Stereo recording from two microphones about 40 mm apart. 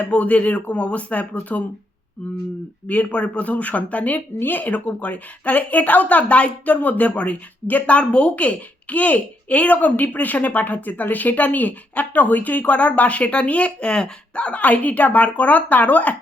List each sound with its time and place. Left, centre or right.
0.1 s a woman's voice: left
2.8 s a woman's voice: left
4.4 s a woman's voice: left